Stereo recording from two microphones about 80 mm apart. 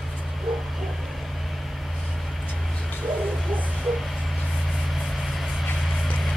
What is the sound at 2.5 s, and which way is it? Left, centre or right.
Vehicle, centre.